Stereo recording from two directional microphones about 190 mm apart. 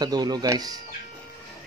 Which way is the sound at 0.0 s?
20° right (ahead or behind).